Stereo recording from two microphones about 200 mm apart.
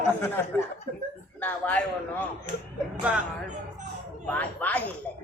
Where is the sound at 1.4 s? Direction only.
10° left (ahead or behind).